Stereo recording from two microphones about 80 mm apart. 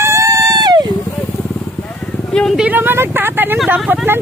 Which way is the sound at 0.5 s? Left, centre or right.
Right.